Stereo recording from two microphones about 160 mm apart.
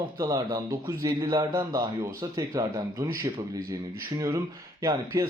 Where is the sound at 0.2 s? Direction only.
20° right (ahead or behind).